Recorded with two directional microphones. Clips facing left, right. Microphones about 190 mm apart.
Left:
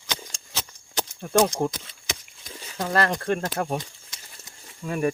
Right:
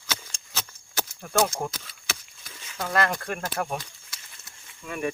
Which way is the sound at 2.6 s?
35° left (ahead or behind).